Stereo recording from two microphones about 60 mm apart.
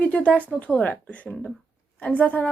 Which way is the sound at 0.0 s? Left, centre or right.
Left.